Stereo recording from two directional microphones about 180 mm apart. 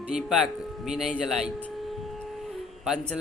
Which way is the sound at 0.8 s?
5° right (ahead or behind).